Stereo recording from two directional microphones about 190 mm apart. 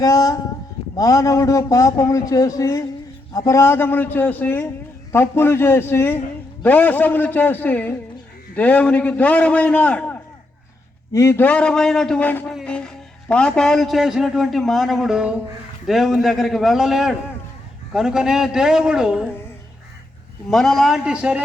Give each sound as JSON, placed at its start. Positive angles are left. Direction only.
{"t": 0.0, "sound": "a man's voice", "side_deg": 20}
{"t": 20.5, "sound": "a man's voice", "side_deg": 0}